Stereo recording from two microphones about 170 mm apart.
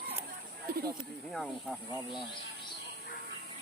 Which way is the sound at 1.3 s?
Centre (ahead or behind).